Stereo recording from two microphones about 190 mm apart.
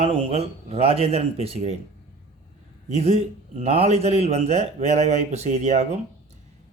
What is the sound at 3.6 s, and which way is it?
Speech, 30° right (ahead or behind).